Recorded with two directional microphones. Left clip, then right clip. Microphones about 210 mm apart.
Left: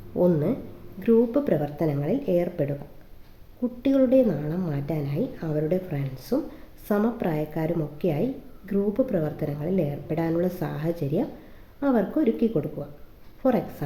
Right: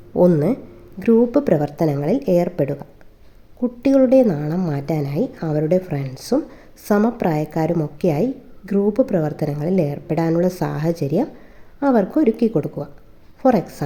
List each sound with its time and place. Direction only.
0.2 s a woman's voice: 40° right (ahead or behind)